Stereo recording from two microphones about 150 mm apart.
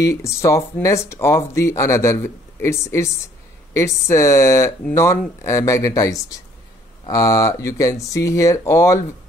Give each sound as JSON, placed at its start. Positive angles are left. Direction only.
{"t": 0.0, "sound": "speech", "side_deg": 20}